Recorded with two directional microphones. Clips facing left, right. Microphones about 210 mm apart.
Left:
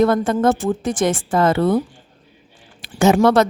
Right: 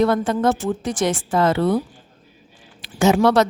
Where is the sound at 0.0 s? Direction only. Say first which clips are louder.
Left 2 dB; 50° left (ahead or behind).